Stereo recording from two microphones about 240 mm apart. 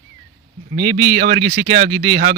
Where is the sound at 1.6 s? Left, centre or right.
Centre.